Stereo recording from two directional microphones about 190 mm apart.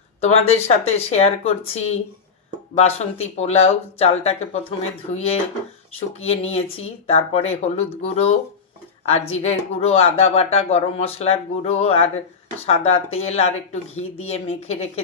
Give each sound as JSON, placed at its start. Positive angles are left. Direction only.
{"t": 0.2, "sound": "speech", "side_deg": 35}